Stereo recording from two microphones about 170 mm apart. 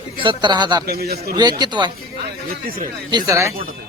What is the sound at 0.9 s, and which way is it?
Speech, 65° right (ahead or behind).